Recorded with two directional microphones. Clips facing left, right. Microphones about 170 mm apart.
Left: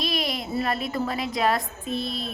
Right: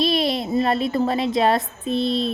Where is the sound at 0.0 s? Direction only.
30° right (ahead or behind).